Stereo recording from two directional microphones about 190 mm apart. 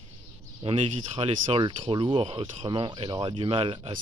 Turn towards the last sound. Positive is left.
turn(degrees=-25)  # may be behind; listen again after turning